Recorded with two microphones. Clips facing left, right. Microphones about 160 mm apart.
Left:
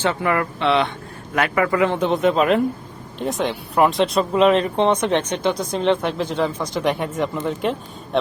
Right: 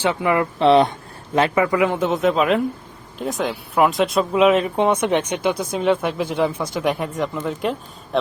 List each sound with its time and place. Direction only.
0.0 s speech: 15° right (ahead or behind)
0.6 s speech: 40° right (ahead or behind)
1.3 s speech: 25° right (ahead or behind); by 8.2 s centre (ahead or behind)